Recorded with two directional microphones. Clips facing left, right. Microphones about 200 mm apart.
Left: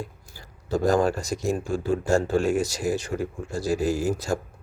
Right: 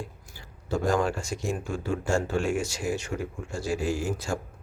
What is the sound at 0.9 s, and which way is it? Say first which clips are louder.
Speech: left 5 dB; 40° left (ahead or behind).